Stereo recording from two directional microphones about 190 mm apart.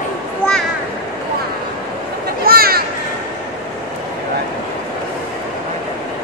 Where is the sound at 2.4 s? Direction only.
50° right (ahead or behind).